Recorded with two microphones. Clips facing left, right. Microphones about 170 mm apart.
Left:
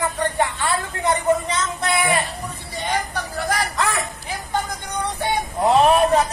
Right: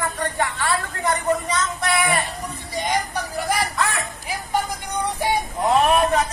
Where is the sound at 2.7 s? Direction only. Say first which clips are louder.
Right 1 dB; 15° right (ahead or behind).